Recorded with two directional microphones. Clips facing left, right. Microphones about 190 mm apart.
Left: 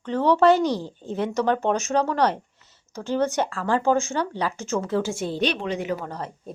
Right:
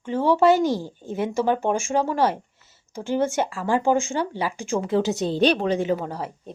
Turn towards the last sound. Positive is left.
turn(degrees=-25)  # may be behind; listen again after turning